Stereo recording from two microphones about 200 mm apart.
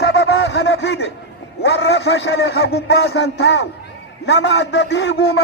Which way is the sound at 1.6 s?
55° left (ahead or behind).